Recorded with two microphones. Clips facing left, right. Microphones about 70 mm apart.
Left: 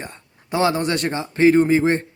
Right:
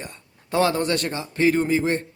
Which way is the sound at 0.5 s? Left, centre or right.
Centre.